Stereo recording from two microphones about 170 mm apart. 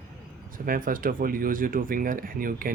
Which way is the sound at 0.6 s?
55° right (ahead or behind).